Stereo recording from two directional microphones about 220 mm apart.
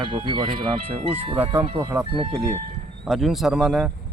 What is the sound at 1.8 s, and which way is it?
Speech, 10° right (ahead or behind).